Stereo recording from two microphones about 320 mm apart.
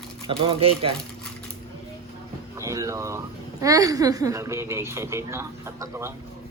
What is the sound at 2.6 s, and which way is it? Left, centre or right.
A woman's voice, centre.